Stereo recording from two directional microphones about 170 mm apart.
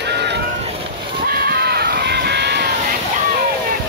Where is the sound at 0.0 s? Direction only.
90° right.